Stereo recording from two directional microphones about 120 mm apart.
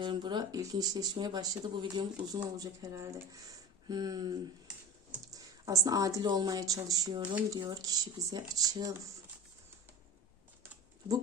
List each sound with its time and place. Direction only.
0.0 s a woman's voice: 40° right (ahead or behind)